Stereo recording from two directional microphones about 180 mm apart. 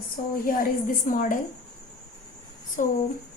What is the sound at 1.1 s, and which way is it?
Speech, 45° left (ahead or behind).